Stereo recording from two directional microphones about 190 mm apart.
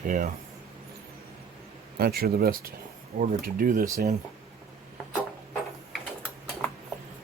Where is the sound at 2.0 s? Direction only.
55° right (ahead or behind).